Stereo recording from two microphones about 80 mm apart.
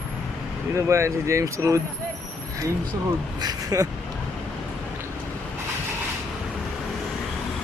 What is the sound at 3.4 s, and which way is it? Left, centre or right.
Speech, right.